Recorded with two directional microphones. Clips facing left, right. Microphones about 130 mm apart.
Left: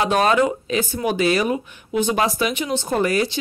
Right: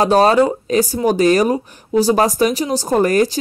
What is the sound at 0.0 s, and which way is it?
Speech, 35° right (ahead or behind).